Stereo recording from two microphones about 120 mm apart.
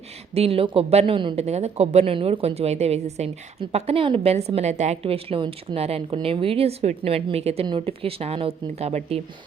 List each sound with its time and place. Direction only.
0.3 s speech: 55° right (ahead or behind)
1.4 s a woman's voice: 65° right (ahead or behind)
2.1 s a woman's voice: 50° right (ahead or behind)